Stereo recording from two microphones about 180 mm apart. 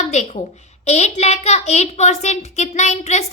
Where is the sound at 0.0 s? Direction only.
40° left (ahead or behind).